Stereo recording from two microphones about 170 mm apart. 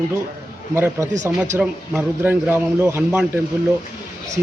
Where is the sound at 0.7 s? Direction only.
15° right (ahead or behind).